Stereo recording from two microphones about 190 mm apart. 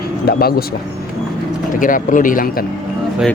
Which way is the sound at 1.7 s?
45° left (ahead or behind).